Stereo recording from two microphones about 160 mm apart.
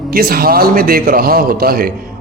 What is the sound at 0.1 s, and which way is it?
A man's voice, 70° right (ahead or behind).